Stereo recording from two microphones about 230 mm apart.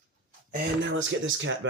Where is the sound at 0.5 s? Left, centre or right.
Right.